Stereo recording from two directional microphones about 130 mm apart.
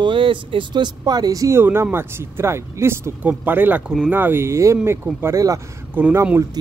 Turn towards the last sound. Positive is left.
turn(degrees=-20)  # may be behind; listen again after turning